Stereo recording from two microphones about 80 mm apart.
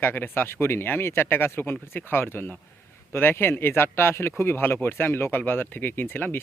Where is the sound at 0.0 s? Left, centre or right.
Left.